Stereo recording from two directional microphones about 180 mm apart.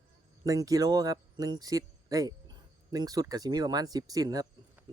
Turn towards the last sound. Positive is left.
turn(degrees=-20)  # may be behind; listen again after turning